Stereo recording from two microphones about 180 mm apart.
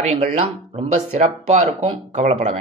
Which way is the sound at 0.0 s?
40° right (ahead or behind).